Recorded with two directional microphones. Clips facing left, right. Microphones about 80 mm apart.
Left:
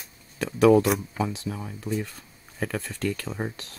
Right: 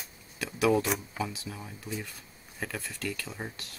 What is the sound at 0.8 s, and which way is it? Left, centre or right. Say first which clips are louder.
Speech: left 7 dB; centre.